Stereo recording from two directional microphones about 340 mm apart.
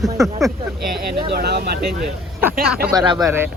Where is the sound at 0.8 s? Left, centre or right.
Right.